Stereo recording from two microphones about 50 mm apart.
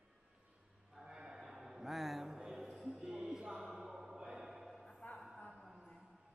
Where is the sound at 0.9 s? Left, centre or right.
Centre.